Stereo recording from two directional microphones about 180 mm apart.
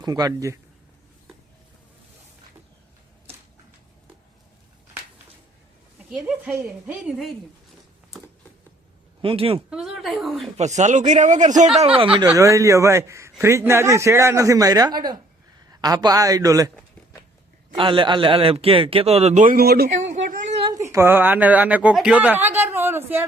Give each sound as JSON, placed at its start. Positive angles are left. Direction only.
{"t": 0.0, "sound": "speech", "side_deg": -20}
{"t": 6.1, "sound": "speech", "side_deg": -5}
{"t": 9.2, "sound": "a man's voice", "side_deg": -30}
{"t": 9.6, "sound": "speech", "side_deg": -5}
{"t": 10.6, "sound": "a man's voice", "side_deg": -40}
{"t": 11.9, "sound": "speech", "side_deg": -30}
{"t": 12.2, "sound": "speech", "side_deg": -15}
{"t": 17.7, "sound": "a man's voice", "side_deg": -30}
{"t": 19.9, "sound": "a sound", "side_deg": -45}
{"t": 20.7, "sound": "speech", "side_deg": -15}